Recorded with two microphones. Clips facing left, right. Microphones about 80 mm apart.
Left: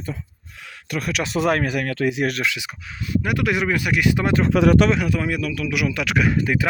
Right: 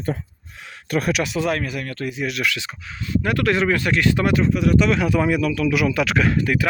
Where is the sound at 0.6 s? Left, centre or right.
Right.